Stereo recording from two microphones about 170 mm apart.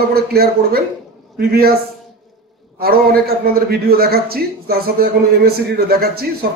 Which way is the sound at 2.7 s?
60° right (ahead or behind).